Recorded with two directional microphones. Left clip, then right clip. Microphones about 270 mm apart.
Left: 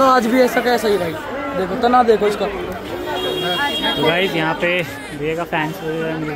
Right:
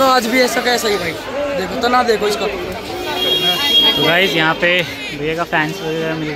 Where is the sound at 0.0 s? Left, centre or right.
Left.